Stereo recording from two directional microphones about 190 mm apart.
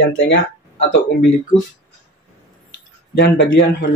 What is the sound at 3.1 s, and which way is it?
Speech, 65° left (ahead or behind).